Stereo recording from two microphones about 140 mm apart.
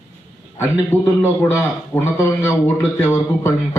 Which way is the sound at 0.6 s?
15° left (ahead or behind).